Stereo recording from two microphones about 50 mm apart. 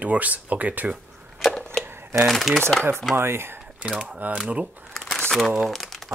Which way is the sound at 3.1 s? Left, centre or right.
Right.